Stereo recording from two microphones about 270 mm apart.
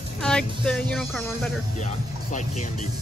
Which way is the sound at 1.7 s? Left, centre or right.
Left.